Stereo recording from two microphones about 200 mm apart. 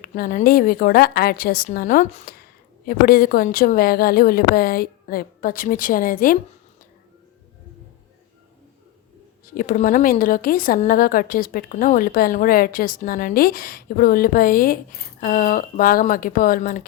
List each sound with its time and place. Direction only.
0.0 s a woman's voice: 45° left (ahead or behind)
9.6 s a woman's voice: 45° left (ahead or behind)